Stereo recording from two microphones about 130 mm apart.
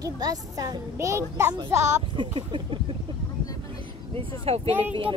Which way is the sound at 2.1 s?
40° right (ahead or behind).